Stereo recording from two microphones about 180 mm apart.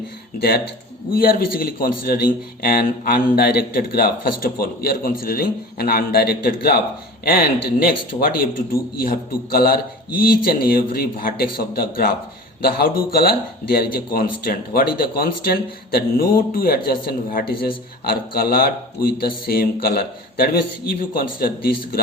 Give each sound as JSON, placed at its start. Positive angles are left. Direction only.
{"t": 0.3, "sound": "a man's voice", "side_deg": 60}
{"t": 9.5, "sound": "a man's voice", "side_deg": 55}